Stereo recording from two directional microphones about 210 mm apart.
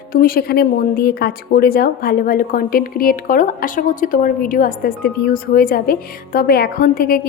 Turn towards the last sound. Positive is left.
turn(degrees=45)  # may be behind; listen again after turning